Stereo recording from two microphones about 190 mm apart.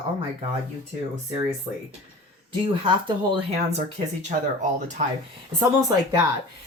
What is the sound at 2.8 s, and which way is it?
Speech, 25° right (ahead or behind).